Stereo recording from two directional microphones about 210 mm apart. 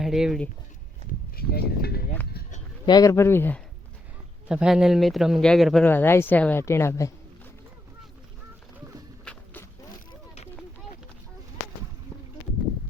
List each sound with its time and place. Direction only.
0.0 s speech: centre (ahead or behind)
1.4 s speech: 50° left (ahead or behind)
2.8 s speech: 20° left (ahead or behind)
4.4 s speech: 5° right (ahead or behind); by 7.1 s 15° left (ahead or behind)
9.2 s a sound: 5° left (ahead or behind)
10.1 s a sound: 30° left (ahead or behind)